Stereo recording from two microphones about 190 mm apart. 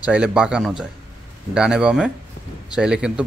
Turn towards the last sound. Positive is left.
turn(degrees=-5)  # may be behind; listen again after turning